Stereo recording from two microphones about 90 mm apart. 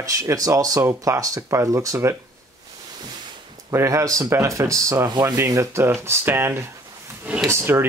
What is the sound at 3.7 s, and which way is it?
Speech, 30° right (ahead or behind).